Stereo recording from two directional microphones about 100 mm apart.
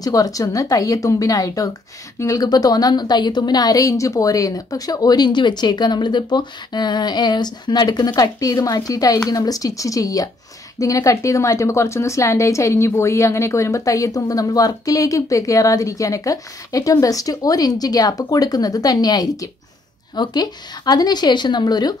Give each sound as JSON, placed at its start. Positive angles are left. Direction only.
{"t": 0.0, "sound": "a woman's voice", "side_deg": 35}